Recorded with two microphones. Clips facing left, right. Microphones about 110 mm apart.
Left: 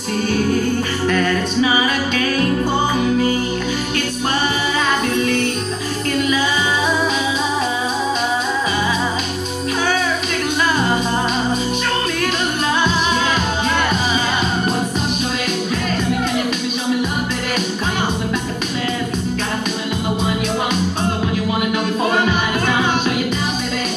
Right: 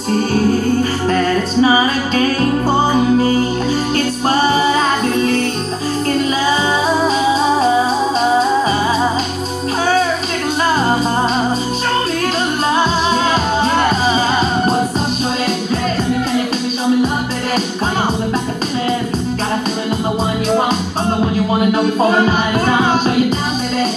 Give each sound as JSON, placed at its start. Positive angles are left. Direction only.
{"t": 1.0, "sound": "music", "side_deg": -35}
{"t": 22.7, "sound": "music", "side_deg": -35}